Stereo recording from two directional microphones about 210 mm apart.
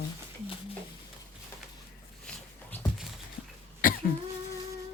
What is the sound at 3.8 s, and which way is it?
Cough, 40° left (ahead or behind).